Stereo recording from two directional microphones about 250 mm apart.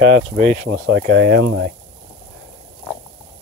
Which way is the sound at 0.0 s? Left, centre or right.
Right.